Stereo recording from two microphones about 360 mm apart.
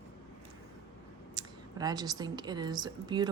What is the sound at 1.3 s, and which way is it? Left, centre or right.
Speech, centre.